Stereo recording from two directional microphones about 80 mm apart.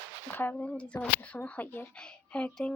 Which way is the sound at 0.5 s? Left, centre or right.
Centre.